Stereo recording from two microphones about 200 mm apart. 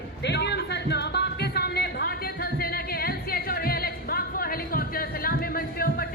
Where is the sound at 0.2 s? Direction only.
60° left (ahead or behind).